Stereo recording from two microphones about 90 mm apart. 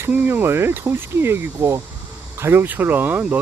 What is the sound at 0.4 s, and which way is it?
Speech, 30° right (ahead or behind).